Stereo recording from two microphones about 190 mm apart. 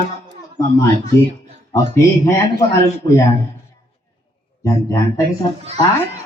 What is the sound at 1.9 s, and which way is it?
Speech, 15° left (ahead or behind).